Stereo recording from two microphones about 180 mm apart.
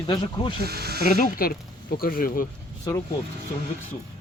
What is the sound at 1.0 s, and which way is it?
Speech, 50° left (ahead or behind).